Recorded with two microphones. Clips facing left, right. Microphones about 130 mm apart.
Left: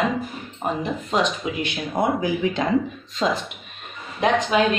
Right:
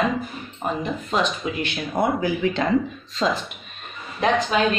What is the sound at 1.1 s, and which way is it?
Speech, 10° left (ahead or behind).